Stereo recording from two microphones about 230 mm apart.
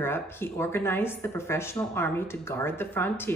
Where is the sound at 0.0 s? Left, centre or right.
Centre.